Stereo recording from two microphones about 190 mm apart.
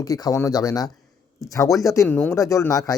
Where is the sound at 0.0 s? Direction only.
20° left (ahead or behind).